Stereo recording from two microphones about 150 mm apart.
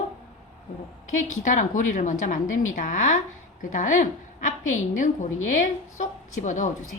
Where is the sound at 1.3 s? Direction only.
55° left (ahead or behind).